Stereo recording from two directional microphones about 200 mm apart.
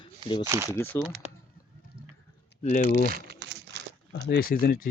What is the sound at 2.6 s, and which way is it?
Speech, 35° left (ahead or behind).